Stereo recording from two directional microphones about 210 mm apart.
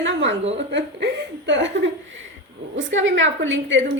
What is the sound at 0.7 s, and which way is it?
A woman's voice, 55° right (ahead or behind).